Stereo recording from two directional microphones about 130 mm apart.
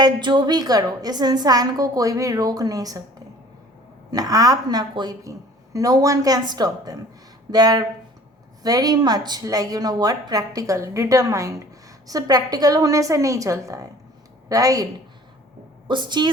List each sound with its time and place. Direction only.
0.0 s a woman's voice: 35° right (ahead or behind)
4.1 s a woman's voice: 30° right (ahead or behind)
15.9 s a woman's voice: 35° right (ahead or behind)